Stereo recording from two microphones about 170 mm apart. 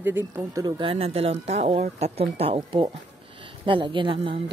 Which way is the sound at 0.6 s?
30° right (ahead or behind).